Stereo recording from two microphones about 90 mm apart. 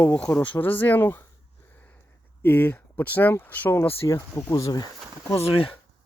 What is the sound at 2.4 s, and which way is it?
Speech, 20° left (ahead or behind).